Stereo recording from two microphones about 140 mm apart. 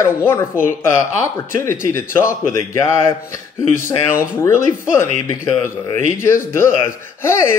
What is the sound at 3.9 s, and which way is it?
Speech, 20° left (ahead or behind).